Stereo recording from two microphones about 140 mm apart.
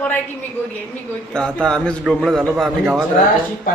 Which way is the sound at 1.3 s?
5° left (ahead or behind).